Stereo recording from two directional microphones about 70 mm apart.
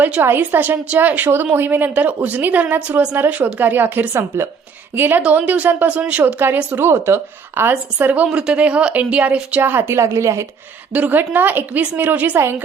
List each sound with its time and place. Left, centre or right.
0.2 s a woman's voice: right
4.1 s a woman's voice: right
5.2 s a woman's voice: centre
6.8 s a woman's voice: right
8.3 s speech: centre
9.6 s a woman's voice: right
10.9 s a woman's voice: right